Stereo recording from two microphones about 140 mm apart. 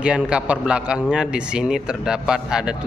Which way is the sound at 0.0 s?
5° right (ahead or behind).